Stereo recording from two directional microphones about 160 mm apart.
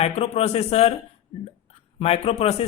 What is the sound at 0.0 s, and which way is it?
Speech, 40° left (ahead or behind).